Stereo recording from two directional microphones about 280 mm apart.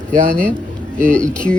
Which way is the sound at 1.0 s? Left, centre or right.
Centre.